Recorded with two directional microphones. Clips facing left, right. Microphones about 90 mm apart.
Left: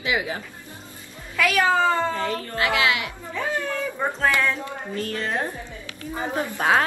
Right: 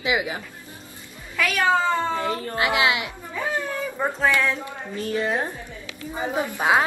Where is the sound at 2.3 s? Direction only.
25° right (ahead or behind).